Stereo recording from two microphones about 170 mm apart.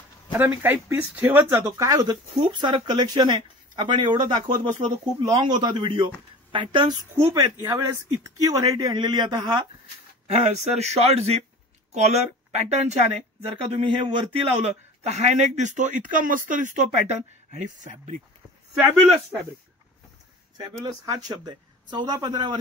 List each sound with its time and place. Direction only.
0.3 s speech: 10° right (ahead or behind); by 7.2 s 30° right (ahead or behind)
7.2 s speech: 20° right (ahead or behind)
10.2 s a man's voice: 40° right (ahead or behind)
20.5 s speech: 25° right (ahead or behind)